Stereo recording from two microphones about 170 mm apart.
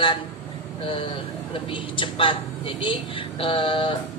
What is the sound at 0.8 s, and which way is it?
A woman's voice, 30° left (ahead or behind).